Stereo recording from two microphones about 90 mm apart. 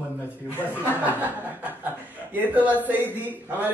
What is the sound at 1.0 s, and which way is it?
Chuckle, 20° right (ahead or behind).